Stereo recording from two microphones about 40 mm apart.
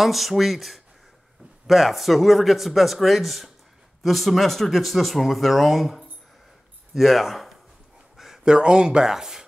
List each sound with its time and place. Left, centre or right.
0.0 s speech: centre
8.5 s speech: right
9.1 s a sound: centre